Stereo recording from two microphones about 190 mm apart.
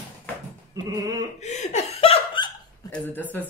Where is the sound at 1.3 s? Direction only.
35° left (ahead or behind).